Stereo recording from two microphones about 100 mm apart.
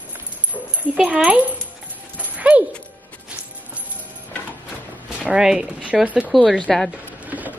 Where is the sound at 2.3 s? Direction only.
15° right (ahead or behind).